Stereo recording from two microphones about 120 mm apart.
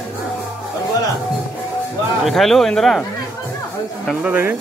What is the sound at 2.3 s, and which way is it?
Speech, centre (ahead or behind).